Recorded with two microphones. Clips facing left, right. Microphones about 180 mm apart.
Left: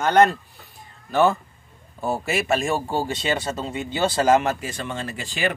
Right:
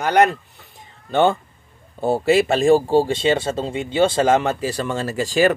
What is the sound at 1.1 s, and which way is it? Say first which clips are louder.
Speech: right 2 dB; 25° right (ahead or behind).